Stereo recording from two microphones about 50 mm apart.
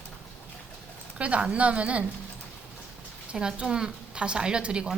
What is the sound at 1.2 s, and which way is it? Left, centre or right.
Speech, right.